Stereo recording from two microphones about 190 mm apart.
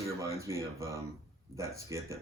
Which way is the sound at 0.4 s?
15° right (ahead or behind).